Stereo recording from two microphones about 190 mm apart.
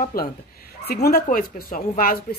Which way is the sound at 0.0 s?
50° left (ahead or behind).